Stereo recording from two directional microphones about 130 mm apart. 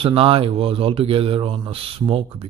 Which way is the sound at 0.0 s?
45° right (ahead or behind).